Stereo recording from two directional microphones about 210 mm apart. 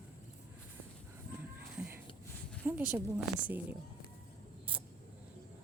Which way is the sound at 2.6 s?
10° right (ahead or behind).